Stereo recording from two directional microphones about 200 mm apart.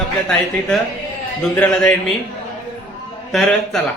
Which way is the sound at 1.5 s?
5° left (ahead or behind).